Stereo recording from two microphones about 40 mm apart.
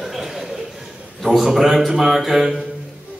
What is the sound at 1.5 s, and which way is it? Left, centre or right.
A man's voice, centre.